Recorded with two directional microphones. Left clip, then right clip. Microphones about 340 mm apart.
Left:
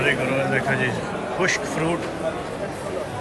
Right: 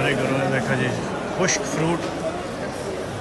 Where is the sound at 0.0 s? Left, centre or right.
Centre.